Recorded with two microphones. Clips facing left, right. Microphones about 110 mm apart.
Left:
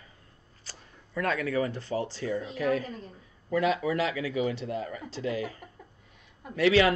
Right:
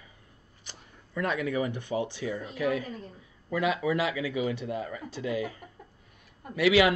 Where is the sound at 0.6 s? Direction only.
20° right (ahead or behind).